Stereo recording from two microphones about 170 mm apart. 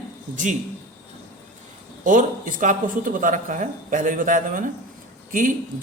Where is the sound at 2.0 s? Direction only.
50° right (ahead or behind).